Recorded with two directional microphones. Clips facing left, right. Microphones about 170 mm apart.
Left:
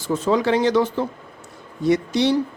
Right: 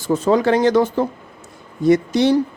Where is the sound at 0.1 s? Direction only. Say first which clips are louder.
Right 3 dB; 45° right (ahead or behind).